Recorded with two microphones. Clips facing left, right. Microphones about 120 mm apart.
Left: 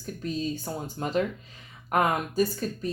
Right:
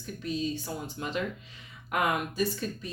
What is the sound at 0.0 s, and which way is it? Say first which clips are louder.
Speech: left 1 dB; 40° left (ahead or behind).